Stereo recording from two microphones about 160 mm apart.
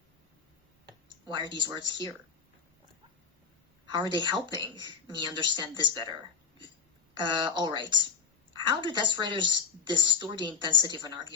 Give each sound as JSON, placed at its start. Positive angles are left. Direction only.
{"t": 0.9, "sound": "speech", "side_deg": -25}
{"t": 3.9, "sound": "speech", "side_deg": -30}